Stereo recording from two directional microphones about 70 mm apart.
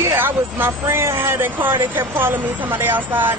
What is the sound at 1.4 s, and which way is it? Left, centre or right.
Speech, right.